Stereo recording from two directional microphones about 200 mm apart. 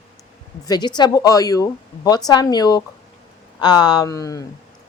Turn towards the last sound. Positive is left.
turn(degrees=15)  # may be behind; listen again after turning